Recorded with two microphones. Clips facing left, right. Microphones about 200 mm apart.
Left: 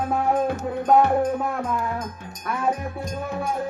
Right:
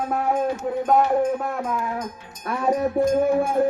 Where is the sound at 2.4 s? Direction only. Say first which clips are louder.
Right 4 dB; 40° right (ahead or behind).